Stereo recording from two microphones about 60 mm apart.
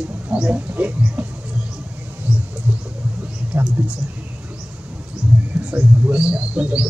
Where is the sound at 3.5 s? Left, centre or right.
Right.